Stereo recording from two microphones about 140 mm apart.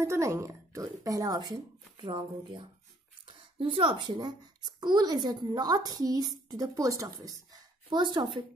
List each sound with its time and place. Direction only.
0.0 s speech: 20° right (ahead or behind)